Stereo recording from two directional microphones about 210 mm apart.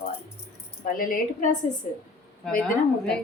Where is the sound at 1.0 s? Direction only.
40° left (ahead or behind).